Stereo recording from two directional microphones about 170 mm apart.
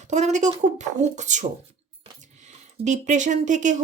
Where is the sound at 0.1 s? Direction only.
45° right (ahead or behind).